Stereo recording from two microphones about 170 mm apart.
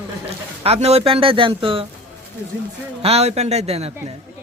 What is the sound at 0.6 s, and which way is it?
Speech, 35° right (ahead or behind).